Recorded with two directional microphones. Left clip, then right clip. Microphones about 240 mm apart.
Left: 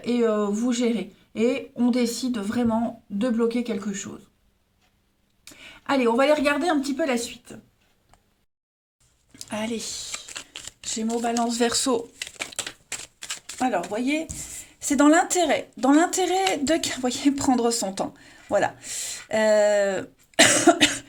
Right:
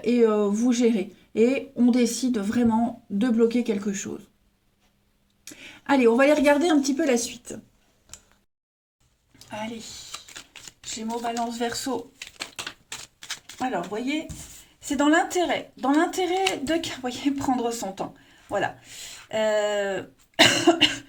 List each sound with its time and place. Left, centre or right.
0.0 s speech: left
5.5 s a woman's voice: centre
9.5 s speech: left
10.9 s speech: left
13.6 s speech: left